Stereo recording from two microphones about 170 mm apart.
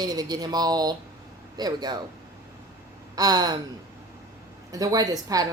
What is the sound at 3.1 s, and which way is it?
Gasp, 25° right (ahead or behind).